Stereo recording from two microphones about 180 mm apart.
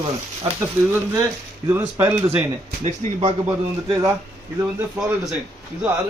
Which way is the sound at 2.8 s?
30° right (ahead or behind).